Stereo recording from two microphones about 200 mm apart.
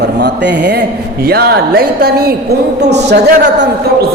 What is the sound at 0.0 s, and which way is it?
A man's voice, 60° right (ahead or behind).